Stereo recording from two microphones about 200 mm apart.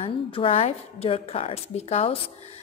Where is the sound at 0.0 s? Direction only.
30° left (ahead or behind).